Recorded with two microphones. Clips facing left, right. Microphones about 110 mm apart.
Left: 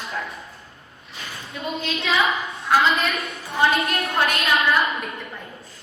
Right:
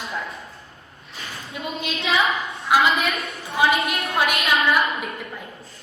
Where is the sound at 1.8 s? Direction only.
15° right (ahead or behind).